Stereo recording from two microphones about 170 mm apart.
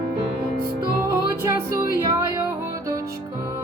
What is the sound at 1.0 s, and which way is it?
Music, 20° right (ahead or behind).